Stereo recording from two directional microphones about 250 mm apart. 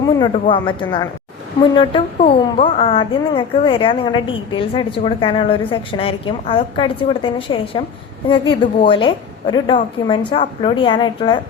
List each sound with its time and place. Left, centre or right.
0.2 s a woman's voice: centre